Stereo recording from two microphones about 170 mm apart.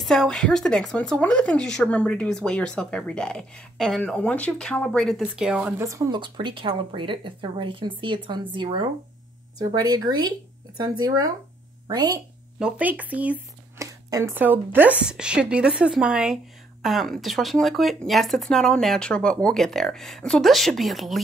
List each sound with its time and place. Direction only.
0.0 s speech: centre (ahead or behind)
5.9 s speech: 20° right (ahead or behind)
12.5 s a woman's voice: 5° right (ahead or behind)